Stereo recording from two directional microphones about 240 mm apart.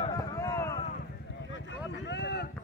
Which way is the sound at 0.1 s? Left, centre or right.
Centre.